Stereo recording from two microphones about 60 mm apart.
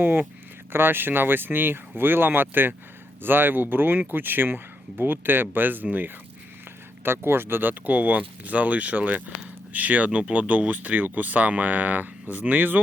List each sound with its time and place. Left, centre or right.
0.0 s speech: right